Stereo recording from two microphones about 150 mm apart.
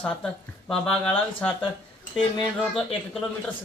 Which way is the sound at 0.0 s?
5° left (ahead or behind).